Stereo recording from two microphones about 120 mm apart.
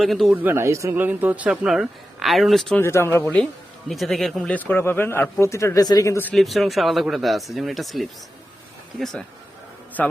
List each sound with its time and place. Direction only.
0.0 s speech: centre (ahead or behind)
0.3 s speech: 20° right (ahead or behind); by 2.7 s centre (ahead or behind)
2.7 s speech: 20° left (ahead or behind)
3.9 s speech: centre (ahead or behind); by 6.1 s 30° left (ahead or behind)
6.3 s speech: centre (ahead or behind)